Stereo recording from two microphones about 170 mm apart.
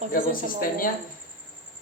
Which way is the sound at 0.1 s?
55° left (ahead or behind).